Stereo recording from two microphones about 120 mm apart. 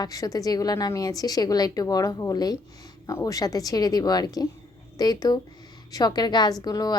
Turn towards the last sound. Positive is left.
turn(degrees=30)  # may be behind; listen again after turning